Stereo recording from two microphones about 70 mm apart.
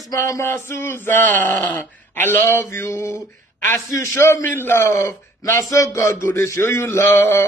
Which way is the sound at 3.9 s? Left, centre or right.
Left.